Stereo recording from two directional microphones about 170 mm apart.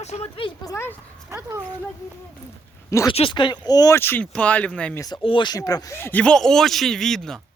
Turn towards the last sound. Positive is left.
turn(degrees=0)  # may be behind; listen again after turning